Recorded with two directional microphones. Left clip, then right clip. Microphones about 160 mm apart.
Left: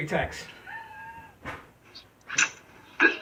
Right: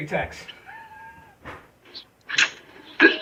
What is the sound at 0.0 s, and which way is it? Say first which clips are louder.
Speech: right 1 dB; 25° left (ahead or behind).